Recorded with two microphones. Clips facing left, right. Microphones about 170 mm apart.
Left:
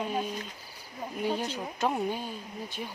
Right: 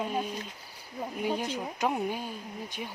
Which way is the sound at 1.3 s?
10° right (ahead or behind).